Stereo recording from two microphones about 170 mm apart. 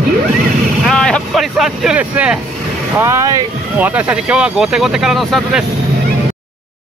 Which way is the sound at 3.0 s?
20° right (ahead or behind).